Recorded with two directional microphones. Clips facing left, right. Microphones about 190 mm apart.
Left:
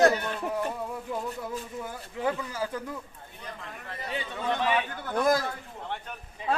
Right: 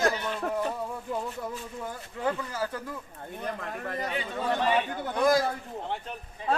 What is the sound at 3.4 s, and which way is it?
Speech, 50° right (ahead or behind).